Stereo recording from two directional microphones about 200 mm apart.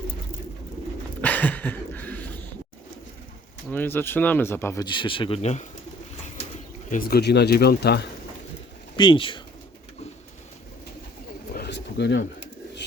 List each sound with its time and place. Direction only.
1.2 s a sound: 10° left (ahead or behind)
3.7 s speech: 10° left (ahead or behind); by 5.6 s 35° left (ahead or behind)
6.9 s speech: 50° left (ahead or behind)
9.0 s speech: 25° left (ahead or behind)
11.5 s pigeon: 55° left (ahead or behind)